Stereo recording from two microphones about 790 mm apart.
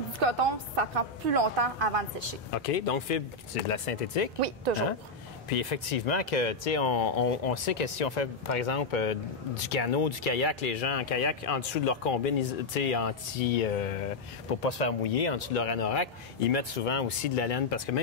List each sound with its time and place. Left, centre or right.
0.4 s a woman's voice: right
2.5 s speech: left
4.4 s speech: right
5.5 s speech: left
14.6 s speech: left